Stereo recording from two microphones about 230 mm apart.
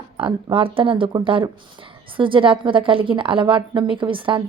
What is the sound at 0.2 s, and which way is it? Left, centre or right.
A woman's voice, right.